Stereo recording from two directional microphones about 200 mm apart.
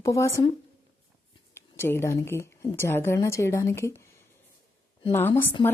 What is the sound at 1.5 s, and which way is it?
Speech, 10° left (ahead or behind).